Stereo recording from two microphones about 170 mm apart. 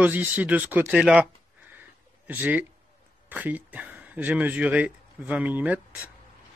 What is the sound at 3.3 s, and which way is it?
Speech, 10° right (ahead or behind).